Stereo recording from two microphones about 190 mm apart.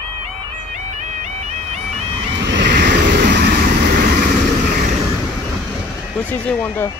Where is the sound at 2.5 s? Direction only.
65° right (ahead or behind).